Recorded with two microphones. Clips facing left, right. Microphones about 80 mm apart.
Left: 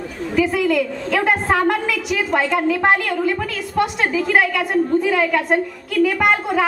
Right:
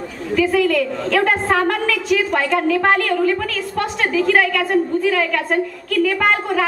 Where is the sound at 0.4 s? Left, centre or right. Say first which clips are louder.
Right 1 dB; centre.